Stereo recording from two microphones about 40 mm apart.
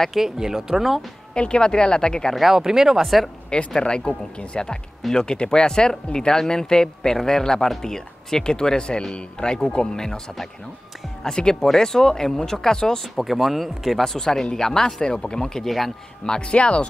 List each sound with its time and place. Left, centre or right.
0.1 s speech: centre
1.3 s speech: left
2.5 s speech: centre
3.4 s speech: left
11.2 s speech: centre
13.2 s speech: centre; by 16.8 s left